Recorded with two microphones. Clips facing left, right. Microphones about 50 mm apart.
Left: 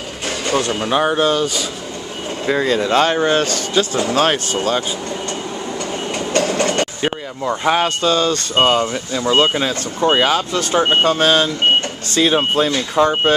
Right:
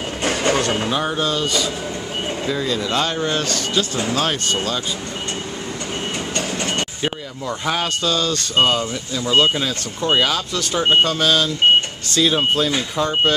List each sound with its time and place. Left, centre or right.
0.4 s music: right
0.8 s speech: left
2.4 s speech: left
6.3 s train: left
7.0 s speech: left